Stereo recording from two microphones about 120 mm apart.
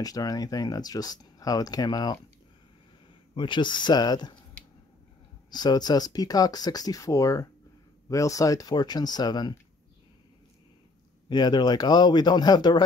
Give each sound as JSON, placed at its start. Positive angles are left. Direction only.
{"t": 0.0, "sound": "speech", "side_deg": 30}
{"t": 3.3, "sound": "speech", "side_deg": 40}
{"t": 5.5, "sound": "speech", "side_deg": 35}
{"t": 11.2, "sound": "speech", "side_deg": 35}